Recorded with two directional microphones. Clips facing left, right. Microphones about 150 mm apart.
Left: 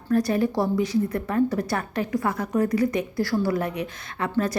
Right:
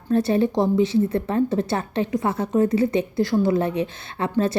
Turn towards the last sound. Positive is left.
turn(degrees=-25)  # may be behind; listen again after turning